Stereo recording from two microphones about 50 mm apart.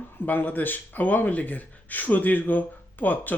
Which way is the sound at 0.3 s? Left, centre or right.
Left.